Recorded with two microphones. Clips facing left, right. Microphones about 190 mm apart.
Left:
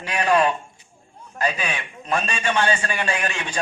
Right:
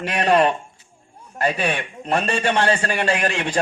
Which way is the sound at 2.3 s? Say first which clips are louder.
Right 3 dB; 35° right (ahead or behind).